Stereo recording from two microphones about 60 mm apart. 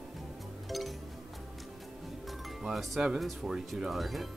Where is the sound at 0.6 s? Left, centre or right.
Centre.